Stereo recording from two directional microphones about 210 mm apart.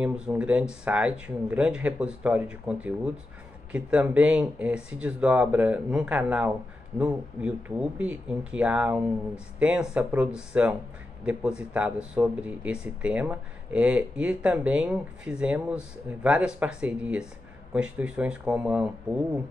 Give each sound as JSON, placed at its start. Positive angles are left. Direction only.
{"t": 0.0, "sound": "speech", "side_deg": -5}